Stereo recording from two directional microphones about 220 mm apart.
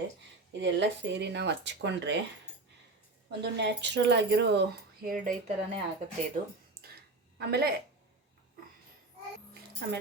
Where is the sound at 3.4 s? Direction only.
50° right (ahead or behind).